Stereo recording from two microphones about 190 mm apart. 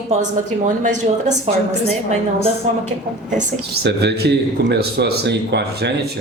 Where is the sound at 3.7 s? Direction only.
60° right (ahead or behind).